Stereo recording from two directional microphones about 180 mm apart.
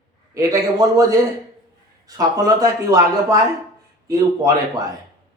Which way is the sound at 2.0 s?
20° right (ahead or behind).